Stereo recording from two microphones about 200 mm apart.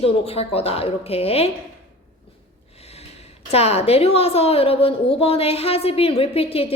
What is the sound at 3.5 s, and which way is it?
A woman's voice, 30° left (ahead or behind).